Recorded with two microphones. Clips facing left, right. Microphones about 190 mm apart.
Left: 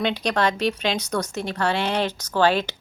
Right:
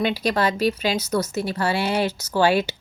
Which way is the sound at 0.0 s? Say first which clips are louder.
Right 1 dB; 5° right (ahead or behind).